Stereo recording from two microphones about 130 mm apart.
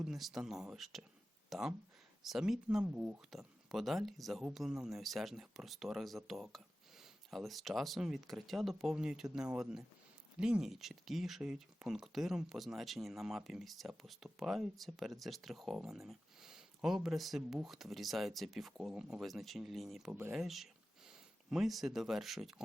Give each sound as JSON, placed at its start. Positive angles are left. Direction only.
{"t": 0.0, "sound": "speech", "side_deg": 0}
{"t": 20.1, "sound": "speech", "side_deg": -20}
{"t": 20.3, "sound": "speech", "side_deg": 0}